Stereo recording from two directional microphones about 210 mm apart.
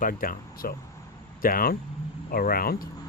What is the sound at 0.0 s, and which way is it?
Speech, 40° left (ahead or behind).